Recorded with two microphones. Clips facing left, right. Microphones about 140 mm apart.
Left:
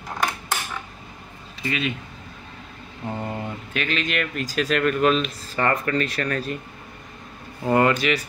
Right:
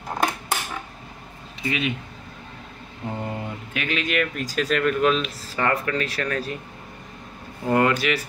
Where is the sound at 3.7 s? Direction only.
10° right (ahead or behind).